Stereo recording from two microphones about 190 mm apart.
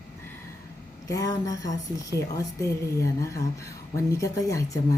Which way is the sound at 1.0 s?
20° left (ahead or behind).